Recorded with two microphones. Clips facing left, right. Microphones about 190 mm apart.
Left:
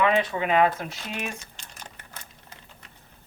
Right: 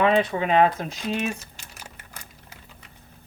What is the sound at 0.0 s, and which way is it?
Speech, 30° right (ahead or behind).